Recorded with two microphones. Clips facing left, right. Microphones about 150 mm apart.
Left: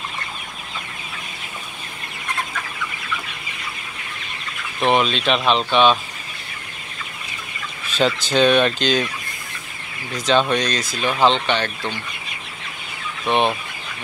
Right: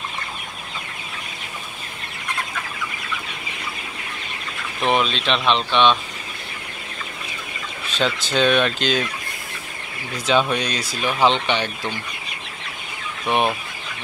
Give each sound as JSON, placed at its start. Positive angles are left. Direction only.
{"t": 4.8, "sound": "speech", "side_deg": 0}
{"t": 8.0, "sound": "speech", "side_deg": 0}
{"t": 10.5, "sound": "speech", "side_deg": -10}
{"t": 13.3, "sound": "speech", "side_deg": -10}